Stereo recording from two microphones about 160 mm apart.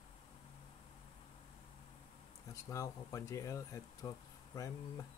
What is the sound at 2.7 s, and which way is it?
Speech, 20° left (ahead or behind).